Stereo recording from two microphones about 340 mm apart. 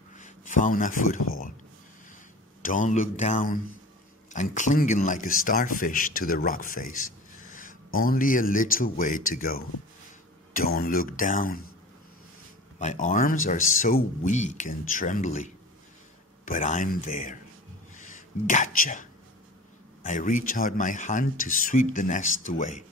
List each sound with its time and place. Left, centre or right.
0.2 s speech: left
2.6 s speech: left
12.7 s speech: left